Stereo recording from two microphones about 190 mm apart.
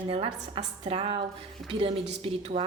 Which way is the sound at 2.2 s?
30° right (ahead or behind).